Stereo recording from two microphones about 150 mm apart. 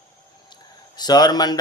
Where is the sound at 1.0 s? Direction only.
30° left (ahead or behind).